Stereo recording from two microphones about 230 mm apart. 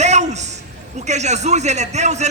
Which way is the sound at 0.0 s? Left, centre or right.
Right.